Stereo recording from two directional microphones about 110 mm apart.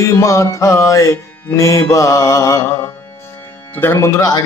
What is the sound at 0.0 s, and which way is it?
Speech, 30° left (ahead or behind).